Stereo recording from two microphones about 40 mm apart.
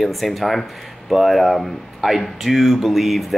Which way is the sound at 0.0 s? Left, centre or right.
Centre.